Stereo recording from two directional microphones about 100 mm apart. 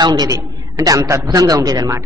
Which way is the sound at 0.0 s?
40° right (ahead or behind).